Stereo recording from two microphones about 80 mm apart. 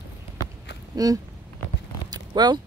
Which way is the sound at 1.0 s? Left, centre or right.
Right.